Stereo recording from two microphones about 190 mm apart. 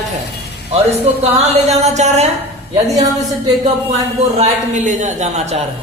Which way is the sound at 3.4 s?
35° right (ahead or behind).